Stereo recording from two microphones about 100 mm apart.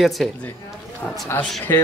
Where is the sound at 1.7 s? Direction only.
25° left (ahead or behind).